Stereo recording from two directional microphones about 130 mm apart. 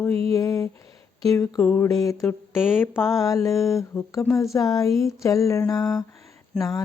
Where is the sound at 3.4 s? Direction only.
25° left (ahead or behind).